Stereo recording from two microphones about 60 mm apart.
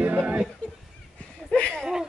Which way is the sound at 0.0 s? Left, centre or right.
Right.